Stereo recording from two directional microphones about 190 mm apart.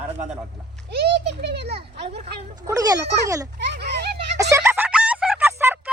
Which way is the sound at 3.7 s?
60° right (ahead or behind).